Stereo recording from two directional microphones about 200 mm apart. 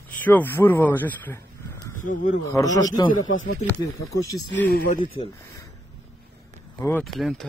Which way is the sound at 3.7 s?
15° left (ahead or behind).